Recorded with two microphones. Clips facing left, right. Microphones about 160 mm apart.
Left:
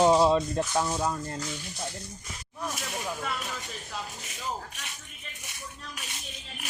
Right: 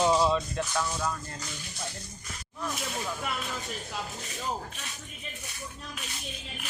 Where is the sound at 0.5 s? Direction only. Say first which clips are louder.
Left 4 dB; 30° left (ahead or behind).